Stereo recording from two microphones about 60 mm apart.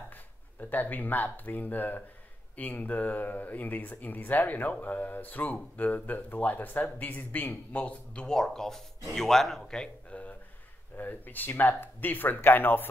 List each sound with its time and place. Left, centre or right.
0.1 s speech: left
8.4 s speech: centre; by 12.8 s left